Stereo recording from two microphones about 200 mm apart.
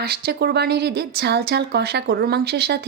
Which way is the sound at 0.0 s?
50° right (ahead or behind).